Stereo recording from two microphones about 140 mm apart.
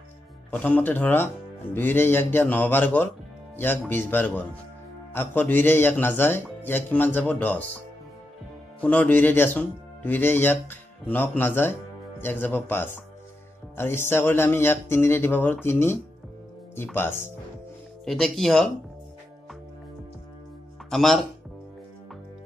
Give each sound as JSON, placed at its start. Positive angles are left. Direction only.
{"t": 0.5, "sound": "speech", "side_deg": 10}
{"t": 8.8, "sound": "speech", "side_deg": 10}
{"t": 18.0, "sound": "speech", "side_deg": 0}
{"t": 20.9, "sound": "speech", "side_deg": 0}